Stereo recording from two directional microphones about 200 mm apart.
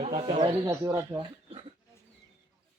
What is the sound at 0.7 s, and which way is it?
Male singing, 15° right (ahead or behind).